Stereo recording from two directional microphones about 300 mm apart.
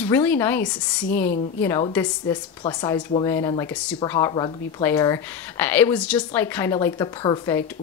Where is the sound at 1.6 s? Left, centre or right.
Centre.